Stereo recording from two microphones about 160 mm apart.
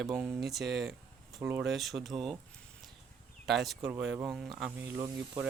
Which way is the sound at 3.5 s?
Centre (ahead or behind).